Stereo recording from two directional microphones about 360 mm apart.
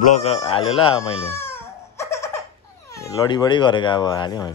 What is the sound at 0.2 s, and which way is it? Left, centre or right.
Baby cry, centre.